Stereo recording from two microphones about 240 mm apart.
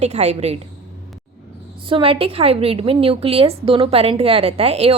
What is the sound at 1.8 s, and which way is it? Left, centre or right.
A woman's voice, right.